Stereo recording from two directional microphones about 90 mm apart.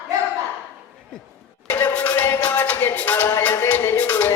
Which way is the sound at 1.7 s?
20° left (ahead or behind).